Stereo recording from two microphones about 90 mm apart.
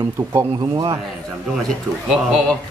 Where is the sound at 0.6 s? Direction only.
45° right (ahead or behind).